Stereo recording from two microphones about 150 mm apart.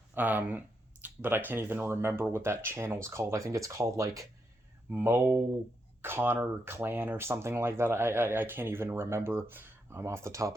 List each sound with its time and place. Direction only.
0.1 s speech: 10° right (ahead or behind)